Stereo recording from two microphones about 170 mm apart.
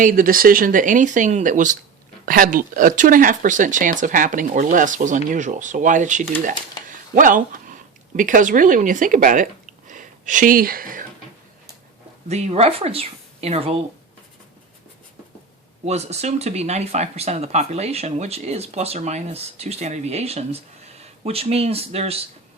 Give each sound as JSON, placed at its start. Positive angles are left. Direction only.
{"t": 0.0, "sound": "speech", "side_deg": -55}
{"t": 12.3, "sound": "speech", "side_deg": -40}
{"t": 15.9, "sound": "speech", "side_deg": -40}